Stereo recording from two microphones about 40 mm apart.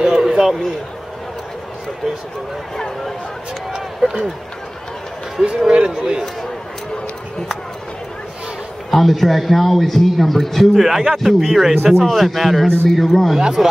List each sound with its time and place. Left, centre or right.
0.2 s a sound: centre
3.7 s speech: centre
5.7 s speech: centre
8.9 s a man's voice: centre
13.4 s speech: centre